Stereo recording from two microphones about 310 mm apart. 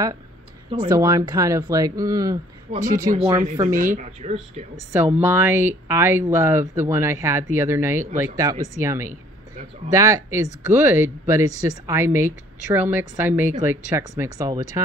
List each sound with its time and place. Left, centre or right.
0.7 s speech: centre
5.2 s speech: centre